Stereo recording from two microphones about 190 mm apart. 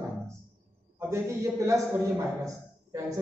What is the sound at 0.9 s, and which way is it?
A man's voice, 15° right (ahead or behind).